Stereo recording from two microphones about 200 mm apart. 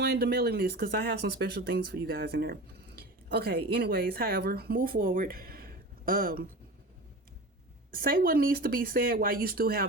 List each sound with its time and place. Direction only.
0.0 s speech: 55° right (ahead or behind)
7.9 s speech: 45° right (ahead or behind)